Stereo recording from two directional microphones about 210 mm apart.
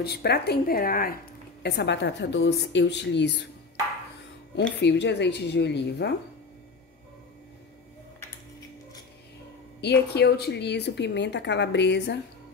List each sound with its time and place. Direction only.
0.0 s a woman's voice: 50° left (ahead or behind)
4.8 s a woman's voice: 55° left (ahead or behind)
9.8 s a woman's voice: 50° left (ahead or behind)